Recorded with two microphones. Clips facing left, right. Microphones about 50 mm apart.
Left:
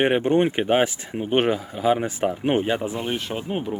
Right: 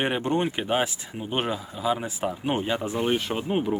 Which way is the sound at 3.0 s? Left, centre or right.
Centre.